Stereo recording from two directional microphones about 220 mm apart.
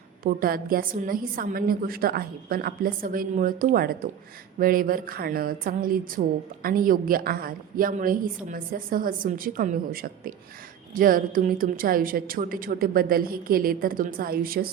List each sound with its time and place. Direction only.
0.2 s a woman's voice: 40° right (ahead or behind)